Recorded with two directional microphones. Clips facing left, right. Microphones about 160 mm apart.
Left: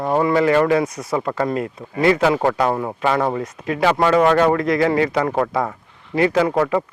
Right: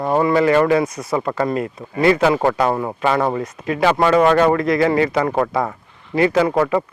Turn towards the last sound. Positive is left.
turn(degrees=-20)  # may be behind; listen again after turning